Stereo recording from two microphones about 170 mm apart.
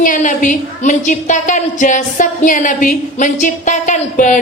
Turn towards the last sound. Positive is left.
turn(degrees=50)  # may be behind; listen again after turning